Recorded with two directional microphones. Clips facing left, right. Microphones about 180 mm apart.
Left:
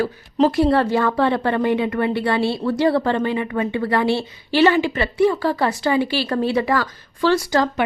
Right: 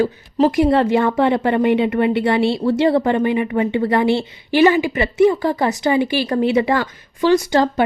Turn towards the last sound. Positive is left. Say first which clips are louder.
# right 3 dB
turn(degrees=-20)  # may be behind; listen again after turning